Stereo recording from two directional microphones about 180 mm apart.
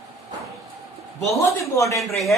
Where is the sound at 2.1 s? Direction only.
Centre (ahead or behind).